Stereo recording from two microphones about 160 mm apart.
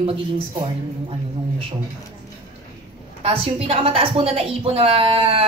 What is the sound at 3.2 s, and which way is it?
A woman's voice, 35° right (ahead or behind).